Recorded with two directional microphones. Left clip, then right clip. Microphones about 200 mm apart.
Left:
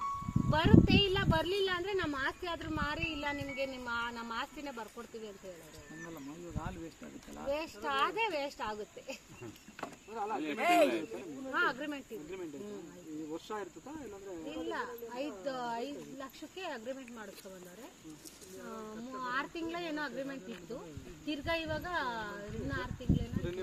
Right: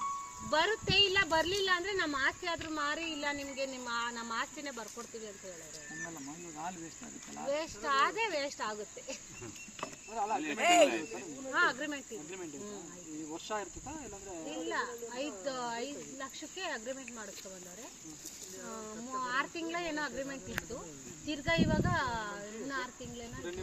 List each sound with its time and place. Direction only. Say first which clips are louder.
0.5 s speech: left 1 dB; 25° left (ahead or behind)
7.5 s speech: right 3 dB; 25° left (ahead or behind)
10.2 s speech: right 3 dB; 5° right (ahead or behind)
10.6 s speech: right 2 dB; 40° left (ahead or behind)
11.5 s speech: right 2 dB; 25° left (ahead or behind)
13.3 s speech: right 3 dB; 10° right (ahead or behind)
14.4 s speech: right 3 dB; 20° left (ahead or behind)
18.6 s speech: even; 20° left (ahead or behind)